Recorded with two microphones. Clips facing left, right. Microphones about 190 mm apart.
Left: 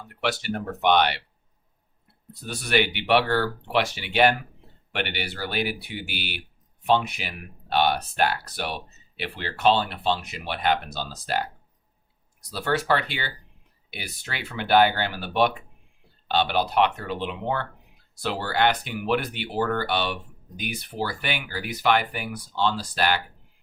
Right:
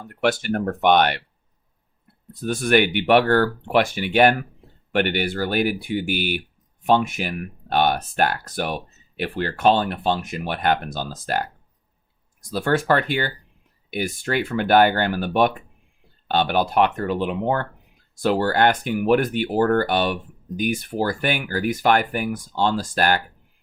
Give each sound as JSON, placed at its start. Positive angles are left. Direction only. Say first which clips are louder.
{"t": 0.0, "sound": "speech", "louder": "right 6 dB", "side_deg": -50}
{"t": 2.3, "sound": "speech", "louder": "right 6 dB", "side_deg": -50}